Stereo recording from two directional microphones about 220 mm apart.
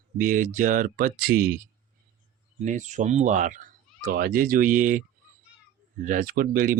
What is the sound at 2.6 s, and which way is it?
Speech, 35° right (ahead or behind).